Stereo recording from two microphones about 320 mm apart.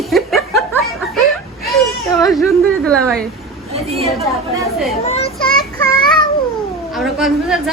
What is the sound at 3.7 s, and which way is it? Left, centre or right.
Speech, centre.